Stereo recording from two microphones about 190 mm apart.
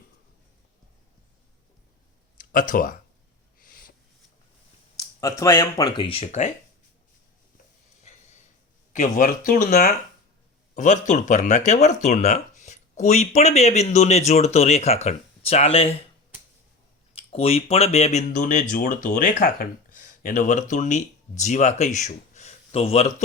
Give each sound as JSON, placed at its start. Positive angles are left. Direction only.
{"t": 2.4, "sound": "speech", "side_deg": 45}
{"t": 3.6, "sound": "a sound", "side_deg": 50}
{"t": 5.4, "sound": "speech", "side_deg": 20}
{"t": 8.9, "sound": "speech", "side_deg": 45}
{"t": 17.2, "sound": "speech", "side_deg": 30}